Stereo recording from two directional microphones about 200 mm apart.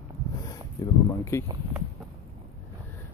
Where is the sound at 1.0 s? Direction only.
15° left (ahead or behind).